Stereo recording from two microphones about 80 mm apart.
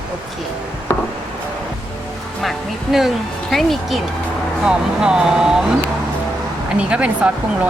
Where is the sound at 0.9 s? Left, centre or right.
Left.